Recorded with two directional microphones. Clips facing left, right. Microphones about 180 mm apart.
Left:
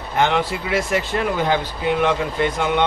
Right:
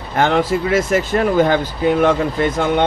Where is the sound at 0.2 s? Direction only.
45° right (ahead or behind).